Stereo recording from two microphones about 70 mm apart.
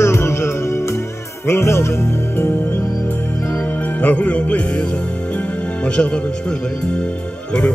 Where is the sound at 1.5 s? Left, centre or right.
Left.